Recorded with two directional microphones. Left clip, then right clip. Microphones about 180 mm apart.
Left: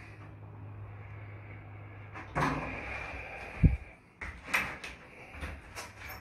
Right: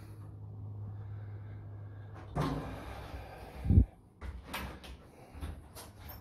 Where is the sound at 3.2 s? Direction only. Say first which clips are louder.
Left 11 dB; 15° right (ahead or behind).